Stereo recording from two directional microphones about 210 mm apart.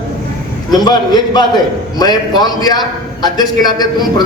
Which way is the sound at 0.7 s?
20° left (ahead or behind).